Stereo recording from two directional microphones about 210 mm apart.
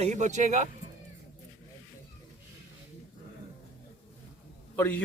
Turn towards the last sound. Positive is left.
turn(degrees=10)  # may be behind; listen again after turning